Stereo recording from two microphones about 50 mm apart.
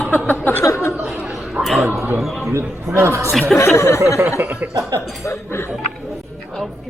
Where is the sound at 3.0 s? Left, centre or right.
Right.